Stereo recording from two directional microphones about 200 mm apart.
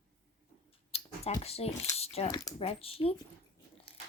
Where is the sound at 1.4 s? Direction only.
30° left (ahead or behind).